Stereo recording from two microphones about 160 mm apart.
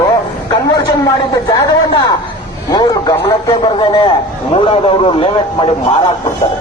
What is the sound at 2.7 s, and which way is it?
A man's voice, 25° left (ahead or behind).